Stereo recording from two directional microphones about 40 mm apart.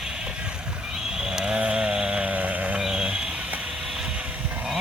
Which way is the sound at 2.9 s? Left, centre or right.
Centre.